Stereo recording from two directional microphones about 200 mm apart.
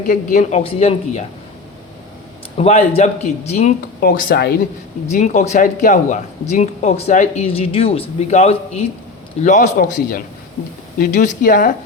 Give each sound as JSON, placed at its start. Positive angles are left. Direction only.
{"t": 0.1, "sound": "speech", "side_deg": 40}
{"t": 0.6, "sound": "speech", "side_deg": 30}
{"t": 2.6, "sound": "speech", "side_deg": 30}
{"t": 4.0, "sound": "speech", "side_deg": 50}
{"t": 5.1, "sound": "speech", "side_deg": 40}